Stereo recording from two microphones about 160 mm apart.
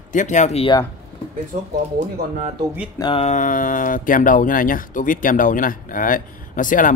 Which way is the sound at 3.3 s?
55° left (ahead or behind).